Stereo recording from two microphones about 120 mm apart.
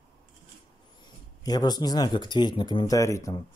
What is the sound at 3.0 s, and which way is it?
Speech, 25° left (ahead or behind).